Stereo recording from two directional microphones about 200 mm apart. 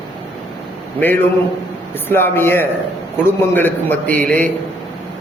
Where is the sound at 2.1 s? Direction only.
10° left (ahead or behind).